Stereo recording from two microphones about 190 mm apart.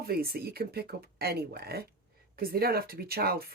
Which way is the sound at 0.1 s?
55° right (ahead or behind).